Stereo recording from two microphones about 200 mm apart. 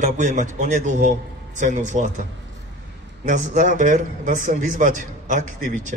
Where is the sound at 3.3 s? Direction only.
40° right (ahead or behind).